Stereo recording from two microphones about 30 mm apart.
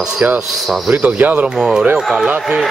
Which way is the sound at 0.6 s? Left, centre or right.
Centre.